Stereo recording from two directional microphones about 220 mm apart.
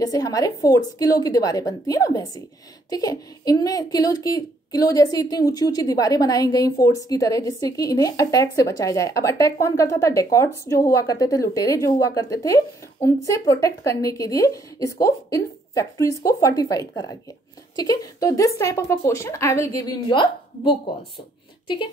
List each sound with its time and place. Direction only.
0.0 s a woman's voice: 15° left (ahead or behind)